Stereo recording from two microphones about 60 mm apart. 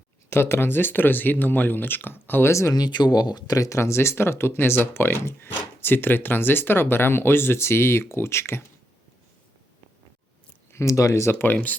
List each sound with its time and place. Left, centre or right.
0.3 s speech: left
2.5 s speech: left
3.4 s speech: left
3.7 s speech: left
10.7 s speech: left
11.3 s speech: left